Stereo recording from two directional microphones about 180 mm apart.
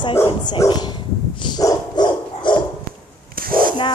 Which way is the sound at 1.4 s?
25° left (ahead or behind).